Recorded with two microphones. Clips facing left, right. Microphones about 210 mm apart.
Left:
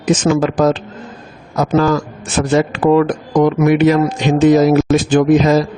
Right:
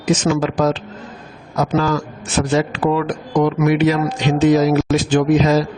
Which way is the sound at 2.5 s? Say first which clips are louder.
Left 6 dB; 50° left (ahead or behind).